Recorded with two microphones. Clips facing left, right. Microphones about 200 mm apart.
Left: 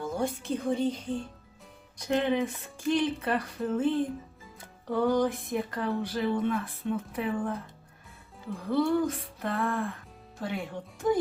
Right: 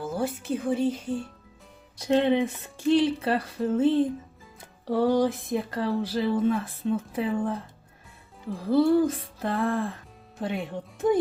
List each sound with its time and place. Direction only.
0.0 s speech: 5° right (ahead or behind)
2.0 s speech: 30° right (ahead or behind)
10.4 s speech: 20° right (ahead or behind)